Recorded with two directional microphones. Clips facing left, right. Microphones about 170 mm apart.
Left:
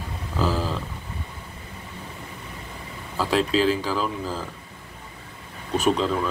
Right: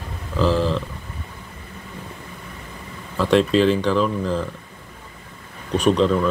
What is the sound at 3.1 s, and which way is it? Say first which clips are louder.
Speech: right 5 dB; 5° left (ahead or behind).